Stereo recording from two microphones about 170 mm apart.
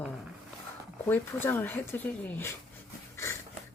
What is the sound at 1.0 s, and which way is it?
Speech, 15° left (ahead or behind).